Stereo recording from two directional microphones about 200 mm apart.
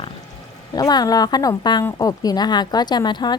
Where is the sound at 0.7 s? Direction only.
20° left (ahead or behind).